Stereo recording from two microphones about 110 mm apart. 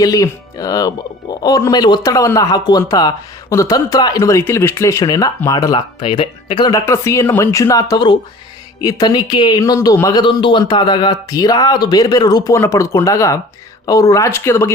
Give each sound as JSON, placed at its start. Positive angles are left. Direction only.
{"t": 0.0, "sound": "speech", "side_deg": 35}
{"t": 5.7, "sound": "speech", "side_deg": 50}
{"t": 6.7, "sound": "speech", "side_deg": 30}
{"t": 9.6, "sound": "speech", "side_deg": 30}
{"t": 10.2, "sound": "speech", "side_deg": 45}